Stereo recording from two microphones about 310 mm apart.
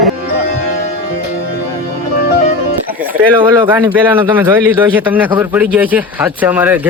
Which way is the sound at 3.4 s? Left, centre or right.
Centre.